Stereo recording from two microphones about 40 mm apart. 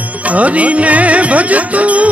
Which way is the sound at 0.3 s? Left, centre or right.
Right.